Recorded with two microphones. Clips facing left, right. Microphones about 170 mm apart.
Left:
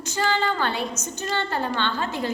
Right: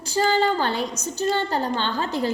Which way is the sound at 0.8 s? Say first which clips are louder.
Right 1 dB; 15° right (ahead or behind).